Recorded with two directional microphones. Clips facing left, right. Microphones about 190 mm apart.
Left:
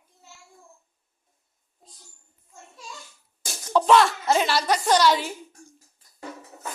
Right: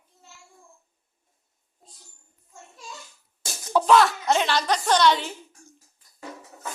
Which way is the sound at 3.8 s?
Centre (ahead or behind).